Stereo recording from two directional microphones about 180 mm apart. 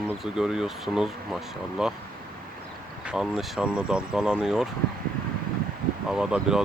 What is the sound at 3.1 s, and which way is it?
Speech, 5° right (ahead or behind).